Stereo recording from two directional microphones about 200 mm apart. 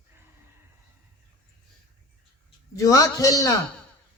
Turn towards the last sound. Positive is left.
turn(degrees=15)  # may be behind; listen again after turning